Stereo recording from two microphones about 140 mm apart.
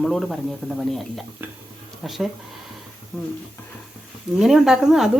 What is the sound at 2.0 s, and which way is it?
Speech, centre (ahead or behind).